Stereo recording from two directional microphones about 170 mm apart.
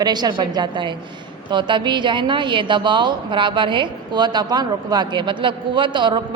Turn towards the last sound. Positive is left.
turn(degrees=-30)  # may be behind; listen again after turning